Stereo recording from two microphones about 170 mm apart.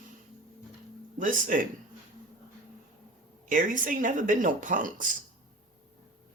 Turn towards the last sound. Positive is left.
turn(degrees=-50)  # may be behind; listen again after turning